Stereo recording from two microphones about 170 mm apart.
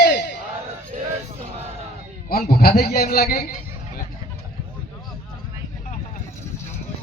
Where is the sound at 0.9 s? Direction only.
45° right (ahead or behind).